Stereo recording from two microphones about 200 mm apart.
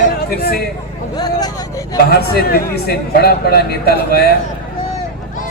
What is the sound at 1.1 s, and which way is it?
Speech, 20° left (ahead or behind).